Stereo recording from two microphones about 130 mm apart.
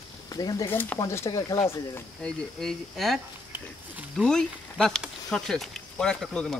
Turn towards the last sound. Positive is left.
turn(degrees=5)  # may be behind; listen again after turning